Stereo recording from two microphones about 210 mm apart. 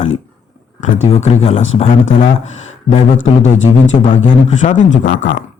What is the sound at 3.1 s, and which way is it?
Speech, 70° left (ahead or behind).